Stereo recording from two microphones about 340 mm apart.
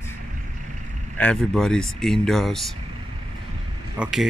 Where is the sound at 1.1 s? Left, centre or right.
Centre.